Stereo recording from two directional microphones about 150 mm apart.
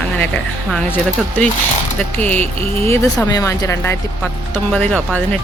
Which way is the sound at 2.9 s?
25° left (ahead or behind).